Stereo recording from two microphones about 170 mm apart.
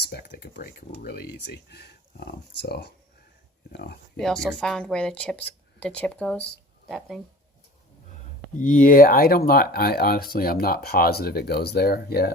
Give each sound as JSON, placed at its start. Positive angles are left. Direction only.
{"t": 0.0, "sound": "speech", "side_deg": 65}
{"t": 4.2, "sound": "speech", "side_deg": 5}
{"t": 8.5, "sound": "speech", "side_deg": 50}